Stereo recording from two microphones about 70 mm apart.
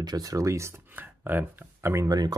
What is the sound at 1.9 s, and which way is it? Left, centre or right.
Speech, right.